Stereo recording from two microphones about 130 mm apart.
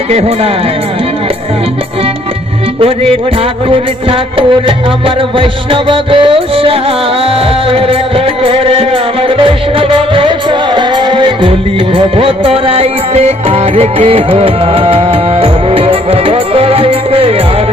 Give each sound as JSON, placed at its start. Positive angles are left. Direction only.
{"t": 0.1, "sound": "speech", "side_deg": -50}
{"t": 5.0, "sound": "music", "side_deg": -40}